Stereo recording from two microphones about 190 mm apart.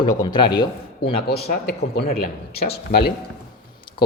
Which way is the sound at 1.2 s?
60° left (ahead or behind).